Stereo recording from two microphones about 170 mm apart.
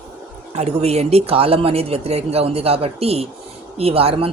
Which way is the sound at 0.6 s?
40° right (ahead or behind).